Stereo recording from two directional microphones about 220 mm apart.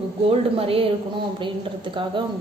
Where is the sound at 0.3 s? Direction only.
25° right (ahead or behind).